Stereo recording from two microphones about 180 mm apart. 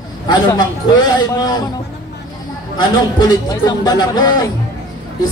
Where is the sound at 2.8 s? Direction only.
20° left (ahead or behind).